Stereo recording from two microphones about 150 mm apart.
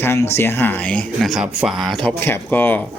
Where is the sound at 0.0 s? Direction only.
15° left (ahead or behind).